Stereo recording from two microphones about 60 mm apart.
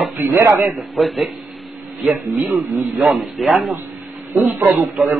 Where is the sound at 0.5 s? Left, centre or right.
Right.